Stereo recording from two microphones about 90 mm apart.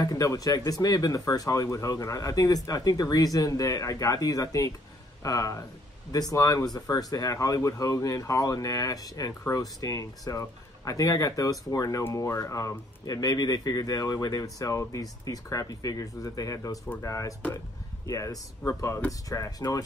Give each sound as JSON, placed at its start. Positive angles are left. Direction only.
{"t": 0.0, "sound": "speech", "side_deg": 40}